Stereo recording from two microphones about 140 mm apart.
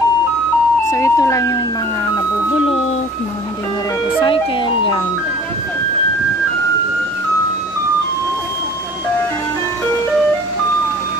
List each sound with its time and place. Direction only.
0.8 s speech: 20° left (ahead or behind)
4.2 s speech: 35° left (ahead or behind)